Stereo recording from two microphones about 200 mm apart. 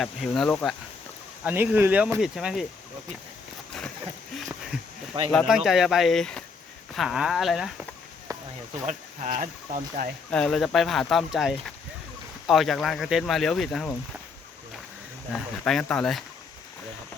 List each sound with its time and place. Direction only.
0.0 s speech: centre (ahead or behind)
1.5 s speech: 10° right (ahead or behind)
4.4 s a sound: centre (ahead or behind)
5.3 s speech: centre (ahead or behind)
8.3 s a sound: 15° right (ahead or behind)
8.9 s speech: 40° right (ahead or behind)
10.3 s speech: 5° left (ahead or behind)
15.6 s speech: 5° left (ahead or behind)